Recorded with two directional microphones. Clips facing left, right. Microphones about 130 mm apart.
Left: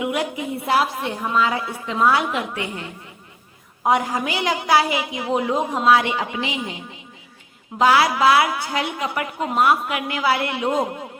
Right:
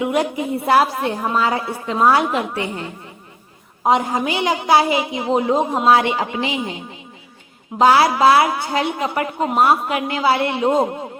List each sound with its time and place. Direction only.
0.0 s a woman's voice: 35° right (ahead or behind)
3.8 s a woman's voice: 25° right (ahead or behind)
7.8 s a woman's voice: 30° right (ahead or behind)